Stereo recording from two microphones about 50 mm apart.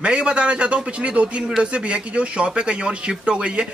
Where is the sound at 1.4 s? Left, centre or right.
Centre.